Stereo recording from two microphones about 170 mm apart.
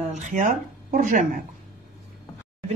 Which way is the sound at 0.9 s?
50° right (ahead or behind).